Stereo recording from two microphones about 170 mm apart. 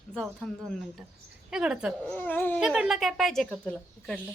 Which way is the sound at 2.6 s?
5° right (ahead or behind).